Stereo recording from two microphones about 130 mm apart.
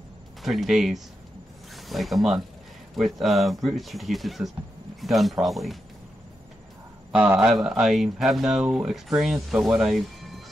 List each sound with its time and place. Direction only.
0.4 s speech: centre (ahead or behind)
7.4 s speech: 5° right (ahead or behind)